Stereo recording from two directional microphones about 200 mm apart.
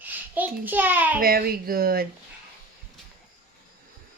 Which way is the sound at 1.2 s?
50° right (ahead or behind).